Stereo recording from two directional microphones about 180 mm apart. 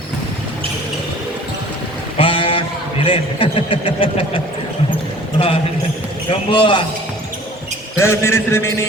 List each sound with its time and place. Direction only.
2.1 s a man's voice: 30° left (ahead or behind)
6.3 s a man's voice: 30° left (ahead or behind)
7.9 s a man's voice: 15° left (ahead or behind)